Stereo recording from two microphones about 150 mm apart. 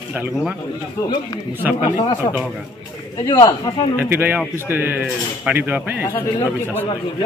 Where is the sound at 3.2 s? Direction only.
25° left (ahead or behind).